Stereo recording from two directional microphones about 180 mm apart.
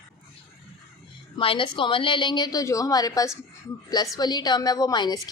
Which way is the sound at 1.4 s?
30° left (ahead or behind).